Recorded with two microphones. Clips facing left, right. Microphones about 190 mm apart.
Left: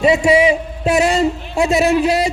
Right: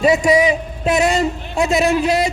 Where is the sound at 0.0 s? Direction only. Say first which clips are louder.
Left 1 dB; 25° left (ahead or behind).